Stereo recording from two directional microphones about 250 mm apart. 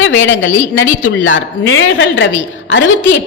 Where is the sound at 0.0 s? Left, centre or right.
Left.